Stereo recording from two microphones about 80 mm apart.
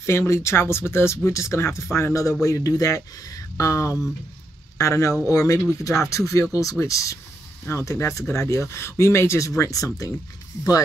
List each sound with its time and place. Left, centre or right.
0.0 s speech: left